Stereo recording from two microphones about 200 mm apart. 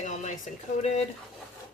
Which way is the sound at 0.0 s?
35° left (ahead or behind).